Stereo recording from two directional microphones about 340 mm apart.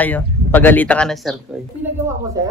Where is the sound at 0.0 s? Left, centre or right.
Centre.